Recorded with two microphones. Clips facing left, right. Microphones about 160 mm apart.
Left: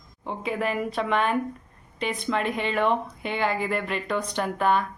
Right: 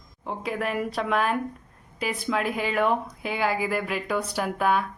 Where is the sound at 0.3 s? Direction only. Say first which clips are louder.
Left 1 dB; centre (ahead or behind).